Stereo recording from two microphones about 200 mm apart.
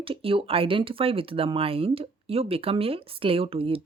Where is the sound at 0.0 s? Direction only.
25° right (ahead or behind).